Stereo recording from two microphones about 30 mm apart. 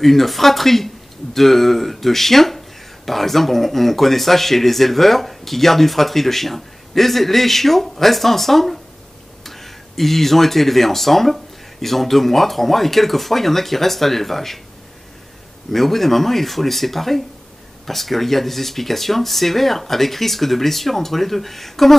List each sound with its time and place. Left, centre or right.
0.0 s speech: centre
15.7 s speech: centre